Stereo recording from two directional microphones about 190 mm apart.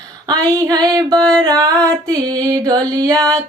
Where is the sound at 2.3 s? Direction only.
20° right (ahead or behind).